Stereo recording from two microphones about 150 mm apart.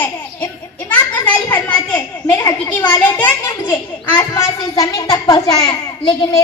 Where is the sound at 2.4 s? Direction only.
25° left (ahead or behind).